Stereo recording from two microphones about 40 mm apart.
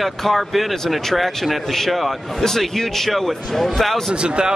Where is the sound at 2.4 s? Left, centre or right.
Centre.